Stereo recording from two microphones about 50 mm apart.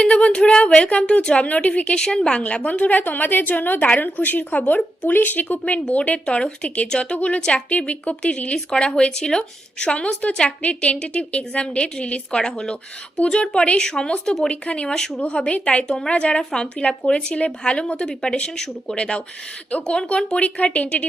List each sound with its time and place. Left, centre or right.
0.0 s a woman's voice: left
2.0 s speech: centre
2.4 s a woman's voice: left
14.5 s a woman's voice: left
14.9 s speech: centre
15.2 s a woman's voice: left
16.4 s a woman's voice: centre